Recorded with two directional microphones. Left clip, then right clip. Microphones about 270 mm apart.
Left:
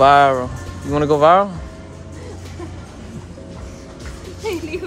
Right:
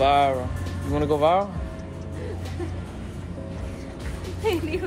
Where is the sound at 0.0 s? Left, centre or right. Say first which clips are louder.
Left 8 dB; left.